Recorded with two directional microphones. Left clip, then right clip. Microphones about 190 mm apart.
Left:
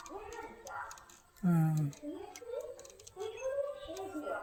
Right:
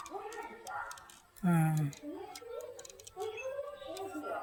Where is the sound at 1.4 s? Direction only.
10° left (ahead or behind).